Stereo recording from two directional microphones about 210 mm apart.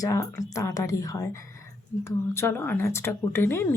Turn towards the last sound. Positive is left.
turn(degrees=10)  # may be behind; listen again after turning